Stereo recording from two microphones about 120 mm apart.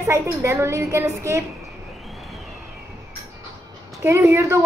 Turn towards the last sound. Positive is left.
turn(degrees=-25)  # may be behind; listen again after turning